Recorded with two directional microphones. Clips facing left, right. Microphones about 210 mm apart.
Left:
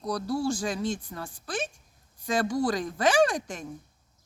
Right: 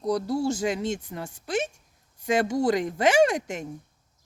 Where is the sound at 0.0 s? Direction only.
20° right (ahead or behind).